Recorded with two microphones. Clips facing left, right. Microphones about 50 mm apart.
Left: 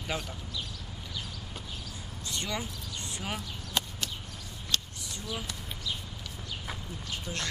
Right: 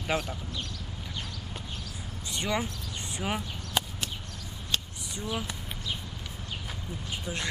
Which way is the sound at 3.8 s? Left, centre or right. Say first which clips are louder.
Right 2 dB; centre.